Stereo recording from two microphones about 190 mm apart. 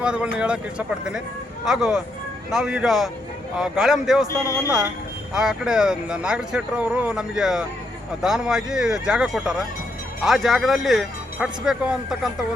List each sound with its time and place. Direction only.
0.0 s speech: 5° right (ahead or behind)
4.3 s speech: 15° left (ahead or behind)
5.3 s speech: 5° right (ahead or behind)